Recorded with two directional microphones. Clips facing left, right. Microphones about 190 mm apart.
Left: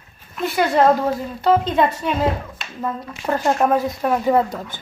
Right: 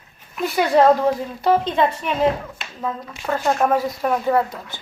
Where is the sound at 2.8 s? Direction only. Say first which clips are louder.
Left 1 dB; 5° left (ahead or behind).